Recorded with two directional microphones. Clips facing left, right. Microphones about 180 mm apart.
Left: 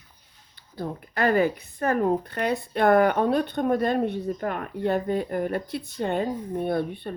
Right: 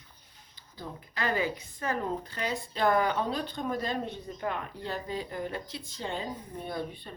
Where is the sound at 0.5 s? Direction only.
60° left (ahead or behind).